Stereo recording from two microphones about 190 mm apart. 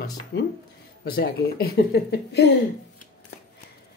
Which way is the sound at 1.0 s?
55° left (ahead or behind).